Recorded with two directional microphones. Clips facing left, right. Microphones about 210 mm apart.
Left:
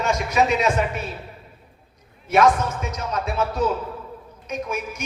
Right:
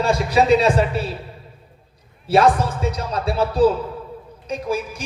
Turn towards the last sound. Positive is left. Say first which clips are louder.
# right 4 dB
turn(degrees=-30)  # may be behind; listen again after turning